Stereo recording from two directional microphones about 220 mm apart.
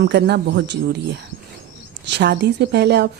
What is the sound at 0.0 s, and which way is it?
Speech, 50° right (ahead or behind).